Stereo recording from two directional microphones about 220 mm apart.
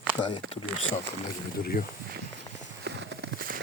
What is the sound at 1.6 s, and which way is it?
Speech, 45° left (ahead or behind).